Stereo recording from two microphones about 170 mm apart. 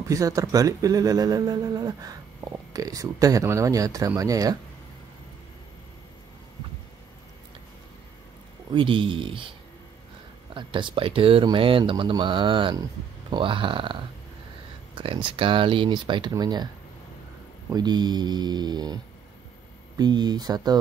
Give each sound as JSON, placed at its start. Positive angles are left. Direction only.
{"t": 0.1, "sound": "speech", "side_deg": -20}
{"t": 8.7, "sound": "speech", "side_deg": -30}
{"t": 15.0, "sound": "speech", "side_deg": -30}
{"t": 17.6, "sound": "speech", "side_deg": -25}
{"t": 20.0, "sound": "speech", "side_deg": -25}